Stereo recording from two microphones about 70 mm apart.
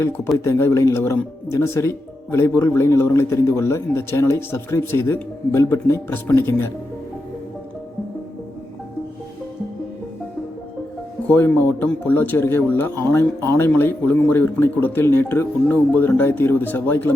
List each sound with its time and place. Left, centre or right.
0.3 s speech: left
11.3 s speech: left